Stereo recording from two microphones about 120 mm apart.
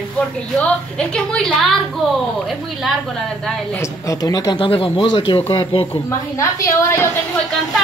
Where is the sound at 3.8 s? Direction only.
30° left (ahead or behind).